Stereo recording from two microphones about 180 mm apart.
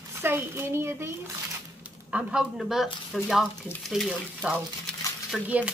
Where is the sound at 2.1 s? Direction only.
5° right (ahead or behind).